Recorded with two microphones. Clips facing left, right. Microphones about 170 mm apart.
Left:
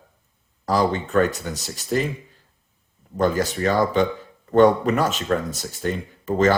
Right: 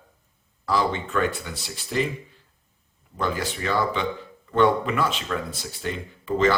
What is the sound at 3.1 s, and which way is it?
Speech, 45° left (ahead or behind).